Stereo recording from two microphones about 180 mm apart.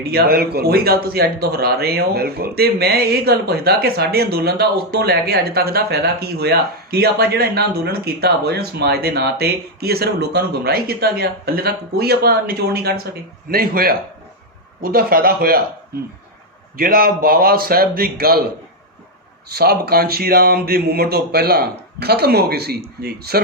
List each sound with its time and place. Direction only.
0.0 s a man's voice: 60° right (ahead or behind)
16.7 s a man's voice: 55° right (ahead or behind)
19.5 s a man's voice: 60° right (ahead or behind)